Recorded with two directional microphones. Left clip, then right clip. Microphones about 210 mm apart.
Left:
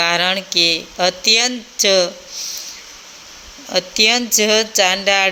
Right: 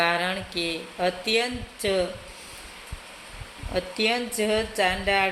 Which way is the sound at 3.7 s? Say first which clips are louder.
Left 10 dB; 45° left (ahead or behind).